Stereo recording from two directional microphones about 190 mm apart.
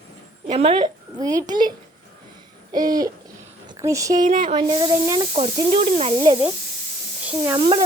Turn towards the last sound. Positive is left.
turn(degrees=-10)  # may be behind; listen again after turning